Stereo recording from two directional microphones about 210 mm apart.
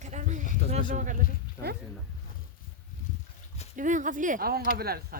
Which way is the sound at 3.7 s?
35° right (ahead or behind).